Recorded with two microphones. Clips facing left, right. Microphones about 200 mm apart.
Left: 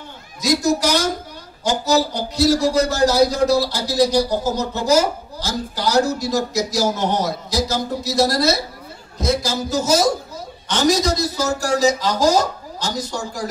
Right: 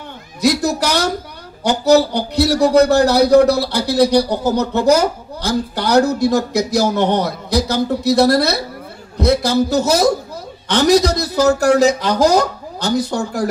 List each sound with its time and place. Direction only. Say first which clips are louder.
0.4 s speech: right 2 dB; 60° right (ahead or behind)